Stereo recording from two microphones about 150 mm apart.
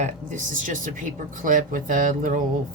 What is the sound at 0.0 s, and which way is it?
A woman's voice, 60° right (ahead or behind).